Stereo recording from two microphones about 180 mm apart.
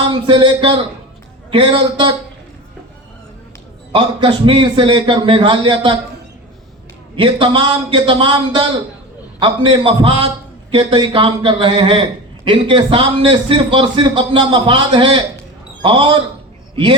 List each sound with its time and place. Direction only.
0.1 s a man's voice: 25° right (ahead or behind)
3.9 s a man's voice: 30° right (ahead or behind)
7.2 s a man's voice: 30° right (ahead or behind)